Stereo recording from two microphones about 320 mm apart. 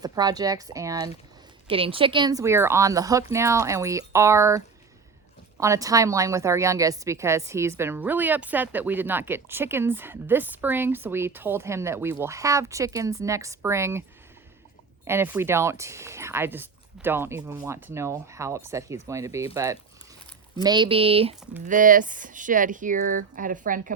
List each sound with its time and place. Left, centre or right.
0.0 s a woman's voice: centre
15.0 s a woman's voice: centre; by 23.9 s right